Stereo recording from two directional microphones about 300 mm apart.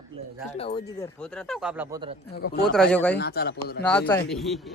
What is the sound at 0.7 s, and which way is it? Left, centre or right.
Speech, centre.